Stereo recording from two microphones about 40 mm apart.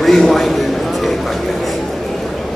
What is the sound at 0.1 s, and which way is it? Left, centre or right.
Speech, centre.